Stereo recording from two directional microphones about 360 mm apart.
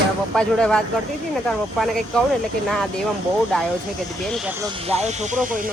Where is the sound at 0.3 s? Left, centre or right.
Centre.